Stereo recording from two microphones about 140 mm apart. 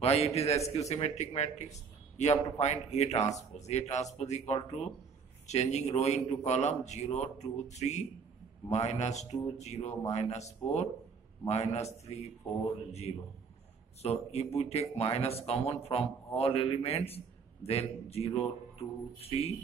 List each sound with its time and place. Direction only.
0.0 s speech: 45° left (ahead or behind)
14.0 s speech: 50° left (ahead or behind)